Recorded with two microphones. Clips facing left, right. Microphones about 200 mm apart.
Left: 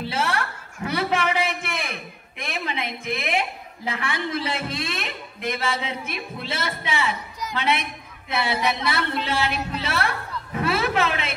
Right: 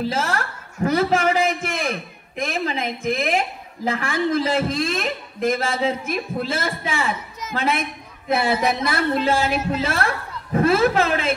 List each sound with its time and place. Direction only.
0.0 s a man's voice: 45° right (ahead or behind)